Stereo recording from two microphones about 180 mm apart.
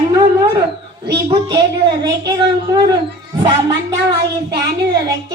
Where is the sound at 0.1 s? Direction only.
20° right (ahead or behind).